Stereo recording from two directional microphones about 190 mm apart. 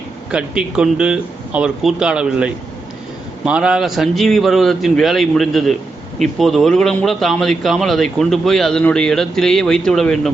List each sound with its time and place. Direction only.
0.3 s a man's voice: 5° right (ahead or behind)